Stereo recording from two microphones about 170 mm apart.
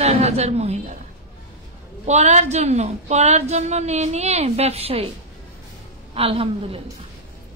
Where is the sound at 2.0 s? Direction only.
40° right (ahead or behind).